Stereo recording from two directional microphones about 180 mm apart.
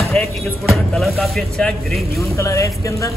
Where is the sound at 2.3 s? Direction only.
15° left (ahead or behind).